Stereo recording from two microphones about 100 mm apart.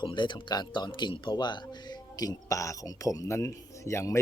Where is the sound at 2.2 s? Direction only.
35° left (ahead or behind).